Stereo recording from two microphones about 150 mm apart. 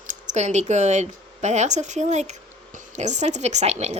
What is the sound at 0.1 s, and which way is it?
A woman's voice, 55° right (ahead or behind).